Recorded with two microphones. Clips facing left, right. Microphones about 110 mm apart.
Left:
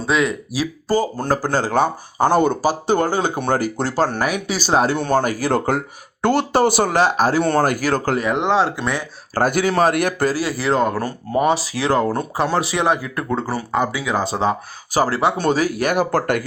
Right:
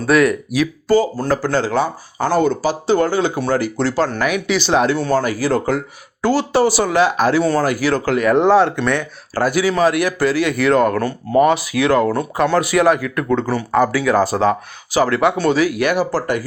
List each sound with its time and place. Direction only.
0.0 s speech: 25° left (ahead or behind)
0.9 s speech: 45° left (ahead or behind)
2.1 s speech: 20° left (ahead or behind)
2.6 s speech: 45° left (ahead or behind)
4.9 s speech: 50° left (ahead or behind)
7.4 s speech: 50° left (ahead or behind)
8.2 s speech: 20° left (ahead or behind)
9.3 s speech: 50° left (ahead or behind)
13.7 s speech: 20° left (ahead or behind)
15.4 s speech: 40° left (ahead or behind)